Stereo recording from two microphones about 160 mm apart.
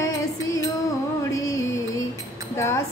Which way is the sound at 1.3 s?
20° left (ahead or behind).